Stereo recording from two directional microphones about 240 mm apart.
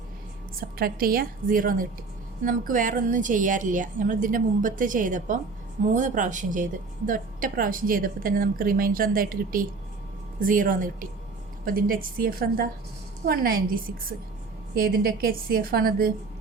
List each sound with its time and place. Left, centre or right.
0.8 s a woman's voice: right